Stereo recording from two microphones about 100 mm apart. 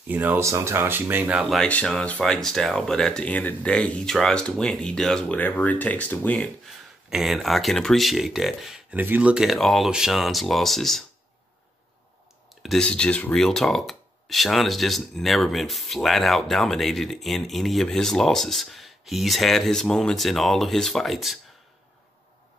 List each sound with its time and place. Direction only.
0.1 s speech: 20° right (ahead or behind)
0.4 s speech: 30° right (ahead or behind)
1.6 s speech: 10° left (ahead or behind)
5.4 s speech: 15° left (ahead or behind)
7.1 s speech: centre (ahead or behind)
8.9 s speech: 20° right (ahead or behind)
9.3 s speech: 5° right (ahead or behind)
12.6 s speech: 5° left (ahead or behind)